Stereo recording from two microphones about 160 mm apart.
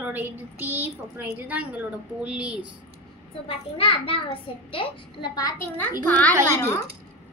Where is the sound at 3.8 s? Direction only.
35° left (ahead or behind).